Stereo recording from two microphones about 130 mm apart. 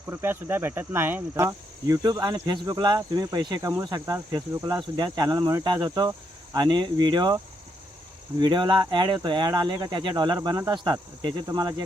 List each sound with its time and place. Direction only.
0.1 s speech: 20° right (ahead or behind)
1.5 s cricket: 30° right (ahead or behind)
8.4 s cricket: 35° right (ahead or behind)